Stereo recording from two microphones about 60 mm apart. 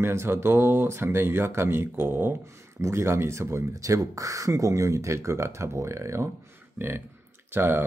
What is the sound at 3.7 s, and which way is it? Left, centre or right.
Speech, right.